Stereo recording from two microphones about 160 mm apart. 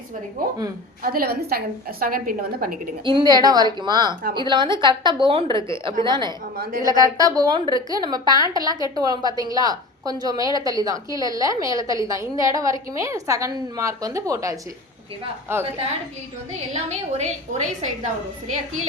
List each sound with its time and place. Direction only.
0.4 s a woman's voice: 65° right (ahead or behind)
3.0 s a woman's voice: 30° right (ahead or behind)
6.6 s a woman's voice: 65° right (ahead or behind)
6.8 s a woman's voice: 20° right (ahead or behind)
16.7 s a woman's voice: 45° right (ahead or behind)